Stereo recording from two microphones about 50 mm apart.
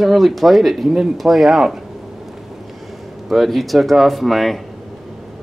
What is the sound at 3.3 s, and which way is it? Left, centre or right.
Speech, centre.